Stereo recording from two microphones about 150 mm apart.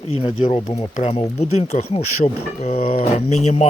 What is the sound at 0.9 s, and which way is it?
Speech, 50° left (ahead or behind).